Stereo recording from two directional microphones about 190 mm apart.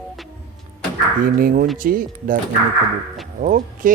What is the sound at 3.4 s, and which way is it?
Speech, 45° right (ahead or behind).